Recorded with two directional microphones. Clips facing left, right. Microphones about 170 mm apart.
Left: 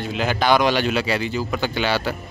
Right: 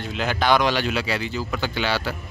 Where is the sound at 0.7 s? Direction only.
20° left (ahead or behind).